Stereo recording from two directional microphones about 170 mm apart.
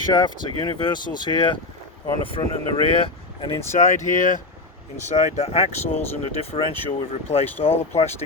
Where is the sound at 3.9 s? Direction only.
45° left (ahead or behind).